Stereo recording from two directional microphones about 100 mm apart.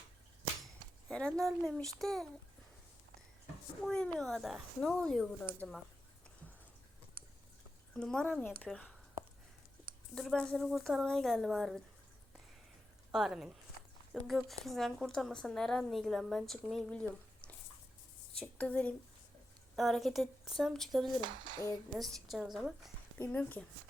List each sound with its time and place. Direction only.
1.0 s speech: 10° left (ahead or behind)
3.8 s speech: 5° left (ahead or behind)
7.9 s speech: 10° left (ahead or behind)
10.2 s speech: 5° left (ahead or behind)
13.1 s speech: 5° right (ahead or behind)
16.9 s drip: 10° left (ahead or behind)
18.3 s speech: 15° left (ahead or behind)
19.7 s speech: centre (ahead or behind)
21.2 s dishes: 50° right (ahead or behind)
21.9 s speech: centre (ahead or behind)
23.1 s speech: 20° left (ahead or behind)